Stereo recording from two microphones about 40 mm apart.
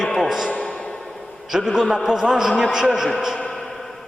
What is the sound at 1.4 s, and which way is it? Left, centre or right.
A man's voice, centre.